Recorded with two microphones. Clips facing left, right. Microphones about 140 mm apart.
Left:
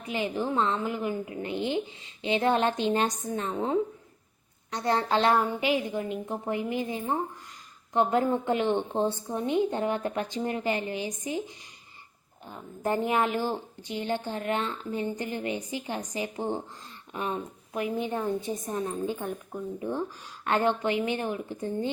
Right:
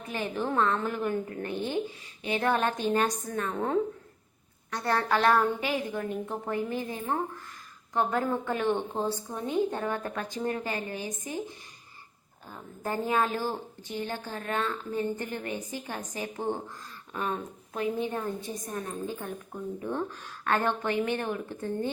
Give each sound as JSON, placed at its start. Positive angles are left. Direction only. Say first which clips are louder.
{"t": 0.1, "sound": "a woman's voice", "louder": "left 2 dB", "side_deg": 15}
{"t": 17.7, "sound": "a woman's voice", "louder": "left 1 dB", "side_deg": 15}